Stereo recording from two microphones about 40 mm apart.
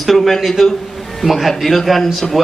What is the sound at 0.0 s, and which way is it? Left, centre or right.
A man's voice, centre.